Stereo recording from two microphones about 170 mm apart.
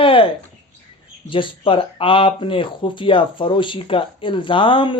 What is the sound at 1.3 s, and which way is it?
Speech, 30° left (ahead or behind).